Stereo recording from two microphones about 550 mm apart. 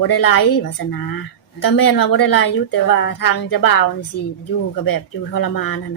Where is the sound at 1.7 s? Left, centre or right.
Left.